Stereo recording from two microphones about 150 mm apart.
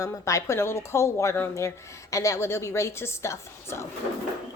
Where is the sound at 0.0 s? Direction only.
20° left (ahead or behind).